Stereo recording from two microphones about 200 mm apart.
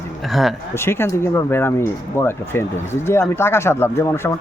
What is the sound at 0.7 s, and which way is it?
Speech, 10° left (ahead or behind).